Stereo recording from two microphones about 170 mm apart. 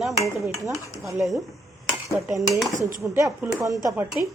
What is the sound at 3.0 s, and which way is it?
Speech, 15° right (ahead or behind).